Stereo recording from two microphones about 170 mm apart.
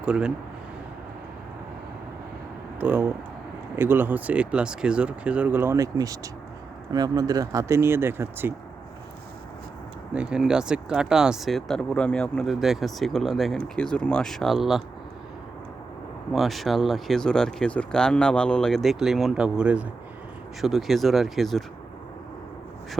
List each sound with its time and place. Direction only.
0.0 s speech: 5° right (ahead or behind)
2.8 s speech: 10° right (ahead or behind)
10.1 s speech: 5° right (ahead or behind)
16.3 s speech: centre (ahead or behind)